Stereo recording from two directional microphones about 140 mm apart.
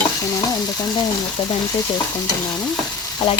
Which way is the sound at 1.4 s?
45° left (ahead or behind).